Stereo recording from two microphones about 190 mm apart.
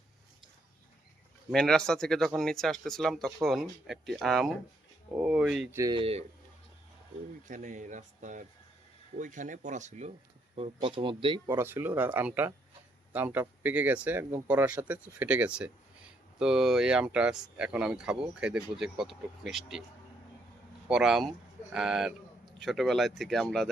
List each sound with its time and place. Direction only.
1.5 s speech: 5° left (ahead or behind)
5.7 s speech: 15° right (ahead or behind)
6.0 s speech: 30° right (ahead or behind)
7.4 s speech: 40° right (ahead or behind)
10.5 s speech: 30° right (ahead or behind)
11.5 s speech: 10° right (ahead or behind)
20.9 s speech: centre (ahead or behind)